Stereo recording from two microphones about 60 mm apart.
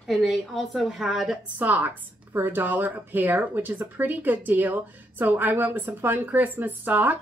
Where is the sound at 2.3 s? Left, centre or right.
Right.